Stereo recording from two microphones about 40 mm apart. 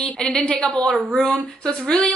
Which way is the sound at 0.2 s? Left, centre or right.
Centre.